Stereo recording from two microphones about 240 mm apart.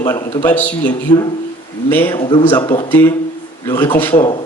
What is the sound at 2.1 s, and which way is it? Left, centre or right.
Speech, left.